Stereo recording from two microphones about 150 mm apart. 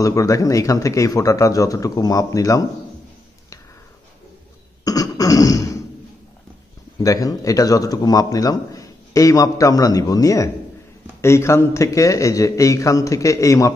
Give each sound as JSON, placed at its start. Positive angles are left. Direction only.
{"t": 0.0, "sound": "a man's voice", "side_deg": 20}
{"t": 4.8, "sound": "beatboxing", "side_deg": 25}
{"t": 7.0, "sound": "a man's voice", "side_deg": 25}